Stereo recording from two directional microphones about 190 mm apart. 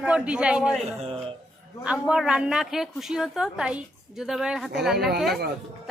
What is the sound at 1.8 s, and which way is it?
A woman's voice, 5° right (ahead or behind).